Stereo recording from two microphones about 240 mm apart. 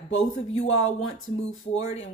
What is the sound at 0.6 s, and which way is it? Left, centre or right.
Speech, left.